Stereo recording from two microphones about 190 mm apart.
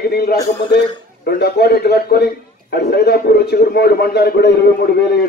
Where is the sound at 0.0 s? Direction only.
55° left (ahead or behind).